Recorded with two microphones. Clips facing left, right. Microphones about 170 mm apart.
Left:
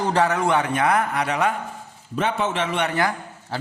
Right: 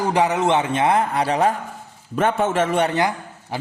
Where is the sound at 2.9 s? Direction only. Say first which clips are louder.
Right 2 dB; 20° right (ahead or behind).